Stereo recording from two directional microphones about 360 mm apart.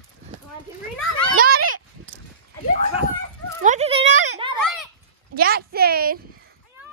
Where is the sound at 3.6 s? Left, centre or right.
Centre.